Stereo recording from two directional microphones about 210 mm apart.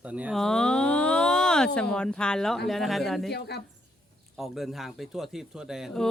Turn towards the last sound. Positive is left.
turn(degrees=0)  # may be behind; listen again after turning